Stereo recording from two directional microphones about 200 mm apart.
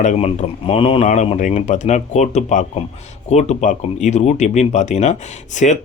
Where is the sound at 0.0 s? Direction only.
35° left (ahead or behind).